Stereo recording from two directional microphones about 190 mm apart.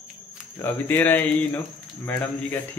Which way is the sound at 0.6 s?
10° left (ahead or behind).